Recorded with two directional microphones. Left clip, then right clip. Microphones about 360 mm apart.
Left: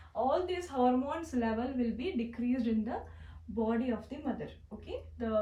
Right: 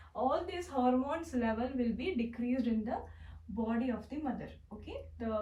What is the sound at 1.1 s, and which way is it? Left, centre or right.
Speech, centre.